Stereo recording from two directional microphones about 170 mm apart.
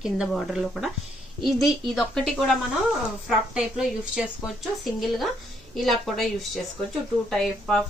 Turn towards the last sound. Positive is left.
turn(degrees=5)  # may be behind; listen again after turning